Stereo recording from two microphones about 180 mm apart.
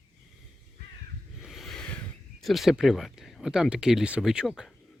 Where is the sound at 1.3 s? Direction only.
Centre (ahead or behind).